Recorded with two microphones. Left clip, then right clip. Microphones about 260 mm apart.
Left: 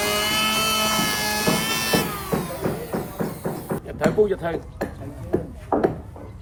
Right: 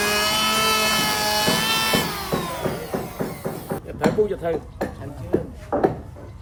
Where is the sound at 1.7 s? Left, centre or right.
Centre.